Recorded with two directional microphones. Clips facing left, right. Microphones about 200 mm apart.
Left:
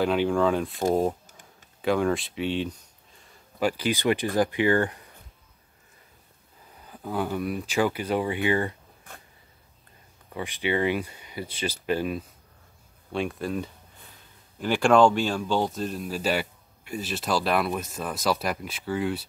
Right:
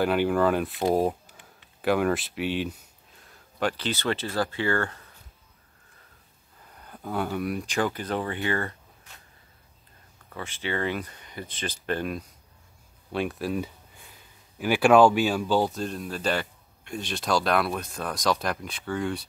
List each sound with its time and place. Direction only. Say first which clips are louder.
0.0 s speech: even; 5° right (ahead or behind)
1.2 s a sound: even; 45° left (ahead or behind)
1.8 s speech: even; 5° right (ahead or behind); by 5.0 s 15° left (ahead or behind)
6.8 s speech: left 1 dB; 5° left (ahead or behind)
9.1 s a sound: left 8 dB; 55° left (ahead or behind)
10.3 s speech: left 4 dB; 15° left (ahead or behind)